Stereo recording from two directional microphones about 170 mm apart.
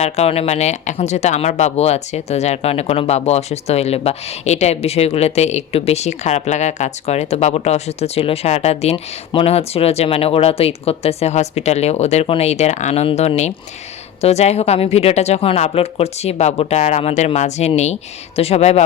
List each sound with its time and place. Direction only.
0.0 s speech: 40° left (ahead or behind)